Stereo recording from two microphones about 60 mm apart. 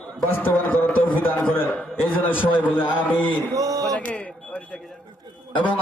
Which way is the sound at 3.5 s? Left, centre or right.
Right.